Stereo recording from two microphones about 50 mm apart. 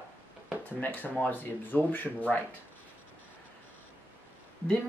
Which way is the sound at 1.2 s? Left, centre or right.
Left.